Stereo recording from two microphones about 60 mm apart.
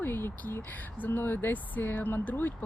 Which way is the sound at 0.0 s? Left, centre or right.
Left.